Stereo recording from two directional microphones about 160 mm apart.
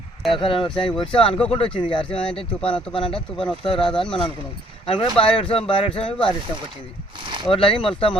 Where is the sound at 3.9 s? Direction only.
5° left (ahead or behind).